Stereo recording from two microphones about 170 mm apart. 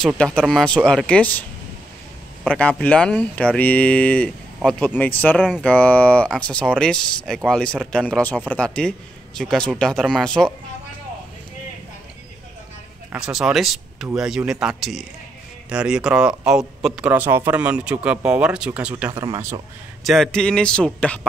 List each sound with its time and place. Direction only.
0.0 s speech: 5° left (ahead or behind)
2.4 s speech: 5° left (ahead or behind)
5.4 s speech: 5° right (ahead or behind)
5.7 s speech: 10° left (ahead or behind)
13.1 s a man's voice: 5° right (ahead or behind); by 19.6 s 20° right (ahead or behind)
20.0 s speech: centre (ahead or behind)